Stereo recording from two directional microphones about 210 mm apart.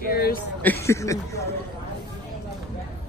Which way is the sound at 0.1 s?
45° left (ahead or behind).